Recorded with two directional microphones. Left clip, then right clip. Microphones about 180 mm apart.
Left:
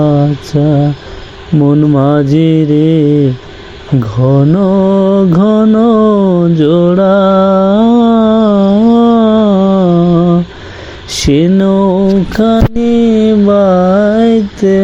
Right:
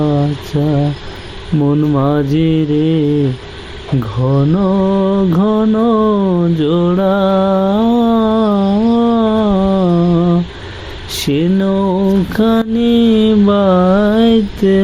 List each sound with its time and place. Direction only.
0.0 s a sound: 20° left (ahead or behind)
0.5 s mantra: 15° left (ahead or behind)
4.0 s mantra: 20° left (ahead or behind)
12.0 s mantra: 10° left (ahead or behind)
12.8 s mantra: centre (ahead or behind)